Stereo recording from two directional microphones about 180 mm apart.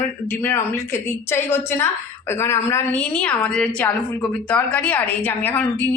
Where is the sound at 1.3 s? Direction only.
15° left (ahead or behind).